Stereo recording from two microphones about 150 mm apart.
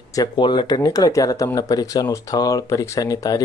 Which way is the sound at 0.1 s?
30° left (ahead or behind).